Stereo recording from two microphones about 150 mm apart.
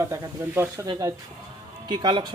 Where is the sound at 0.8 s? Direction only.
25° right (ahead or behind).